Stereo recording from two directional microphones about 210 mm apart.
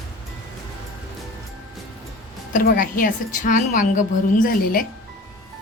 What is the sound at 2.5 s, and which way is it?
A woman's voice, 40° left (ahead or behind).